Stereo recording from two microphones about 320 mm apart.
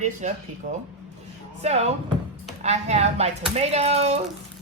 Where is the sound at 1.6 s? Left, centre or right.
Centre.